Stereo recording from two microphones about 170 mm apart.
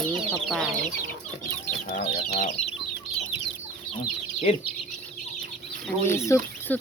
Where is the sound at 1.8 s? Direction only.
65° left (ahead or behind).